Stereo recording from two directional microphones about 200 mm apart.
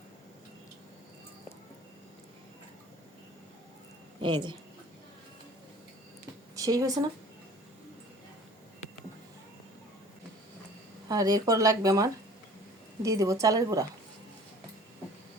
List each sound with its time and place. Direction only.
4.2 s a woman's voice: 25° right (ahead or behind)
6.6 s speech: 15° right (ahead or behind)
11.1 s speech: 20° right (ahead or behind)